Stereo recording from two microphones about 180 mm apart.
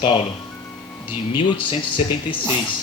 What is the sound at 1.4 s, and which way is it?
Speech, 30° left (ahead or behind).